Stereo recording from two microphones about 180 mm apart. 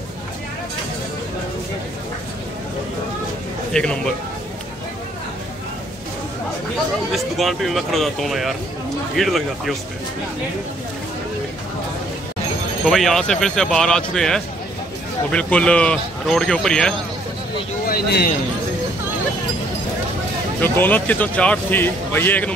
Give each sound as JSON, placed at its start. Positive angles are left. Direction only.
{"t": 3.7, "sound": "speech", "side_deg": 5}
{"t": 7.1, "sound": "speech", "side_deg": 0}
{"t": 12.8, "sound": "speech", "side_deg": 0}
{"t": 17.8, "sound": "speech", "side_deg": 55}
{"t": 20.6, "sound": "a man's voice", "side_deg": 10}